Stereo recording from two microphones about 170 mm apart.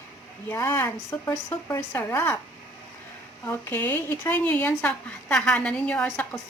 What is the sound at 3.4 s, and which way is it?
Speech, 15° left (ahead or behind).